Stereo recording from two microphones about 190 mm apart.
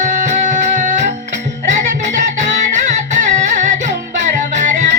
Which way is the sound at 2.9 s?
40° right (ahead or behind).